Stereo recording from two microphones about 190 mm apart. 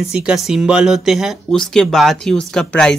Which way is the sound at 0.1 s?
5° right (ahead or behind).